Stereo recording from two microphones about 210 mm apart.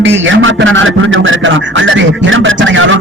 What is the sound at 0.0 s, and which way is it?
A man's voice, 60° right (ahead or behind).